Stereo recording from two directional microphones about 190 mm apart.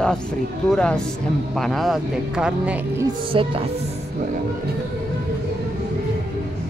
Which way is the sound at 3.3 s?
30° right (ahead or behind).